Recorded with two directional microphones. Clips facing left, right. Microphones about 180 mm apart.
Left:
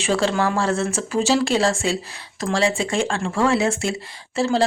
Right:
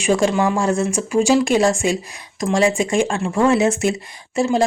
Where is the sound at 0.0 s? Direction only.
15° right (ahead or behind).